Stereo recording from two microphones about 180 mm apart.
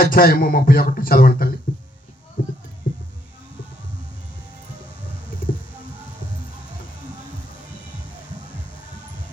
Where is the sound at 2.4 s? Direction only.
50° left (ahead or behind).